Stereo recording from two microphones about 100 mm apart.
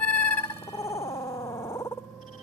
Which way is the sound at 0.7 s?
30° left (ahead or behind).